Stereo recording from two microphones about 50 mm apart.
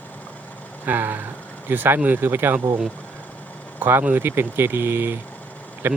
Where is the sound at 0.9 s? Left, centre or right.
Right.